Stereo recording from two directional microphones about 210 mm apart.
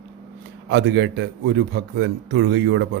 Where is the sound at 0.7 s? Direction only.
55° right (ahead or behind).